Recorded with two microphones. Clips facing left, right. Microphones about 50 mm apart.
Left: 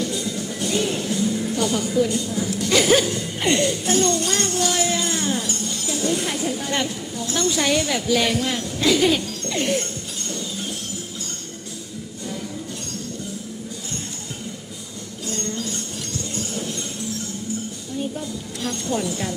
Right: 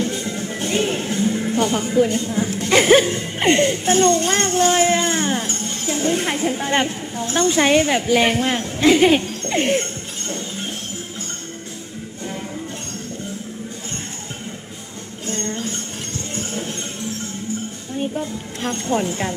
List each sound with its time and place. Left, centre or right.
0.0 s speech: right
15.3 s music: right
18.0 s a sound: right